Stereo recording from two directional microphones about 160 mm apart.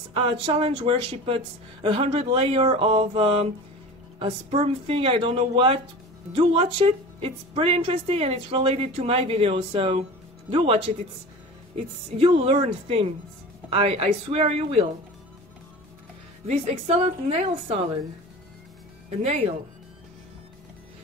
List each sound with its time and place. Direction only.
0.1 s a woman's voice: 35° right (ahead or behind)
12.2 s a woman's voice: 35° right (ahead or behind)
16.4 s a woman's voice: 40° right (ahead or behind)
19.2 s a woman's voice: 40° right (ahead or behind)